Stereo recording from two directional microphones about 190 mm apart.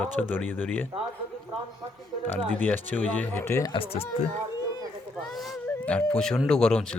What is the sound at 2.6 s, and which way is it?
Speech, 10° left (ahead or behind).